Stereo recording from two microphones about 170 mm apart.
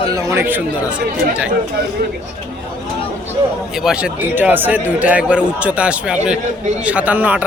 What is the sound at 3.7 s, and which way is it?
Speech, 5° right (ahead or behind).